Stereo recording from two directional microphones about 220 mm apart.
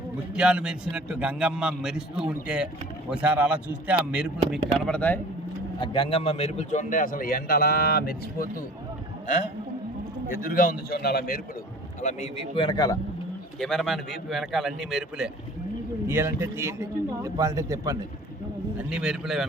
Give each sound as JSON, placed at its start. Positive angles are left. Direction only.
{"t": 0.3, "sound": "a man's voice", "side_deg": -5}
{"t": 4.9, "sound": "speech", "side_deg": 5}
{"t": 5.8, "sound": "a man's voice", "side_deg": 25}
{"t": 12.0, "sound": "a man's voice", "side_deg": 30}
{"t": 13.6, "sound": "a man's voice", "side_deg": 0}
{"t": 18.8, "sound": "a man's voice", "side_deg": -5}